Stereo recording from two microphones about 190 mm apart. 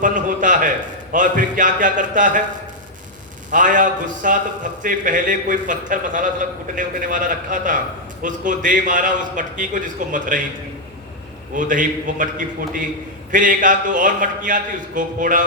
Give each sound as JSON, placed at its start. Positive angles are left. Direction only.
{"t": 0.0, "sound": "a man's voice", "side_deg": -45}
{"t": 3.5, "sound": "a man's voice", "side_deg": -45}
{"t": 11.5, "sound": "a man's voice", "side_deg": -45}